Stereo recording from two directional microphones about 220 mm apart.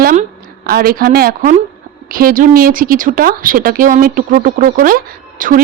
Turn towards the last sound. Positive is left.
turn(degrees=-40)  # may be behind; listen again after turning